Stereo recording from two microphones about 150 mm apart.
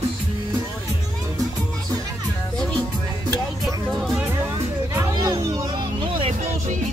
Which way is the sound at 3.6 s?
Centre (ahead or behind).